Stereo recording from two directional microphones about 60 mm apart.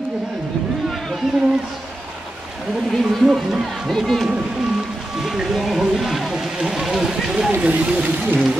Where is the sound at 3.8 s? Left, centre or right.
Centre.